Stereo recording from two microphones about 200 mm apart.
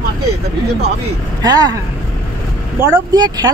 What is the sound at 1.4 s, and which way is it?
Speech, 20° right (ahead or behind).